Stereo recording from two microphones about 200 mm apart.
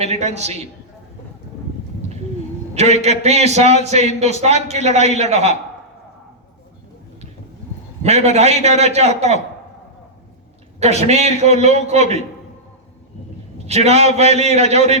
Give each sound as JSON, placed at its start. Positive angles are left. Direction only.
{"t": 0.0, "sound": "a man's voice", "side_deg": -35}
{"t": 2.7, "sound": "a man's voice", "side_deg": -35}
{"t": 8.0, "sound": "a man's voice", "side_deg": -35}
{"t": 10.8, "sound": "a man's voice", "side_deg": -35}
{"t": 13.7, "sound": "a man's voice", "side_deg": -30}